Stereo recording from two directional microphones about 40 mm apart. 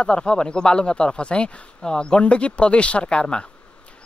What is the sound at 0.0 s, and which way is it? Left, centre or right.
Speech, left.